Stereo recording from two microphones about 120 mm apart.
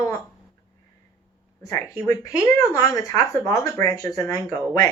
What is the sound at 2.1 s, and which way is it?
Speech, 25° left (ahead or behind).